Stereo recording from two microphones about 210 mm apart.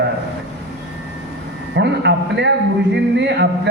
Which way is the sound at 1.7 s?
55° right (ahead or behind).